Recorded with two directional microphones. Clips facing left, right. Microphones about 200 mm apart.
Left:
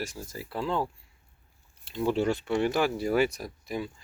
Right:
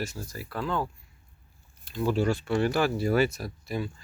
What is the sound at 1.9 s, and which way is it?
Speech, 25° left (ahead or behind).